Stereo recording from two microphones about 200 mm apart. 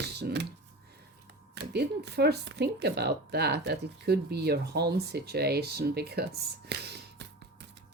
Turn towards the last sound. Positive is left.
turn(degrees=-55)  # may be behind; listen again after turning